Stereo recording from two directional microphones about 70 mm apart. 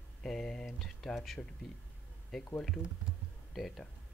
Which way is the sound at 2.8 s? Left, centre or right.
Left.